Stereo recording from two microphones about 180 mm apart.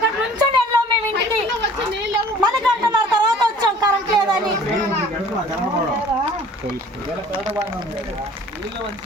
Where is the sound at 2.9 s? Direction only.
25° right (ahead or behind).